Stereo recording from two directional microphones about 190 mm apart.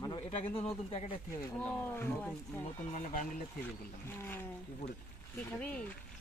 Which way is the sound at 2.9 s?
40° left (ahead or behind).